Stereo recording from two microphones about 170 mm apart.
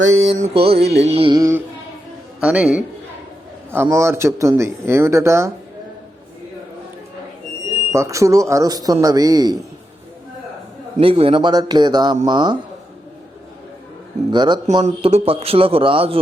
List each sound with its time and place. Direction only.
0.2 s a man's voice: 40° right (ahead or behind)
0.8 s music: 70° right (ahead or behind)
1.0 s a man's voice: 35° right (ahead or behind)
1.4 s speech: 15° right (ahead or behind)
7.9 s speech: 20° right (ahead or behind)
11.0 s speech: 35° right (ahead or behind)
14.3 s a man's voice: 25° right (ahead or behind)